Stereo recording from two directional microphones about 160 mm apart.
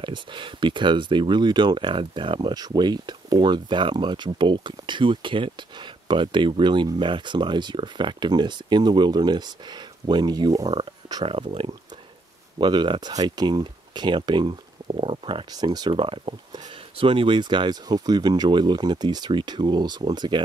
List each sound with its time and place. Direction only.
0.0 s speech: 30° right (ahead or behind)